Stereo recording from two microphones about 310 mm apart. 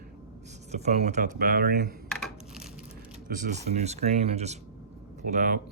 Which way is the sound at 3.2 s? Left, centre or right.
Right.